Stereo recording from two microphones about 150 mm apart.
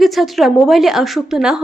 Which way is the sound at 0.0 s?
Centre (ahead or behind).